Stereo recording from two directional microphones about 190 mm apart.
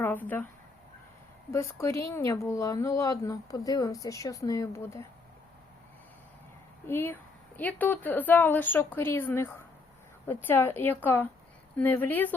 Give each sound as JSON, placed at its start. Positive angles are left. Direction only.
{"t": 0.0, "sound": "speech", "side_deg": 10}
{"t": 1.5, "sound": "speech", "side_deg": 15}
{"t": 6.8, "sound": "speech", "side_deg": 10}